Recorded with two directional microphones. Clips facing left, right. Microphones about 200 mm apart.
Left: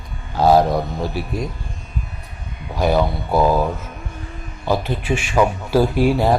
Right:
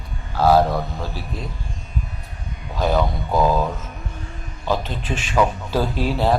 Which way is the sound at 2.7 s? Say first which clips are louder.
Left 3 dB; 10° left (ahead or behind).